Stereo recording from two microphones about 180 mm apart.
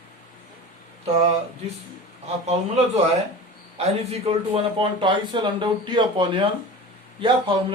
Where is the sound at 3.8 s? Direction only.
35° right (ahead or behind).